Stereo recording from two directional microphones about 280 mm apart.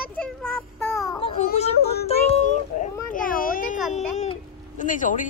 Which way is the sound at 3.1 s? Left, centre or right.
Left.